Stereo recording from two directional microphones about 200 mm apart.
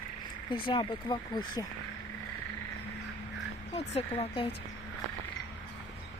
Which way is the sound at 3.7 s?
30° left (ahead or behind).